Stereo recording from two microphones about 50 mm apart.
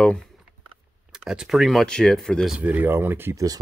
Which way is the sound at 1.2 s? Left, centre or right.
Centre.